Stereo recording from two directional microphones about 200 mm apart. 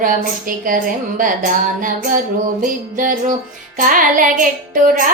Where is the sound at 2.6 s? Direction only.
40° right (ahead or behind).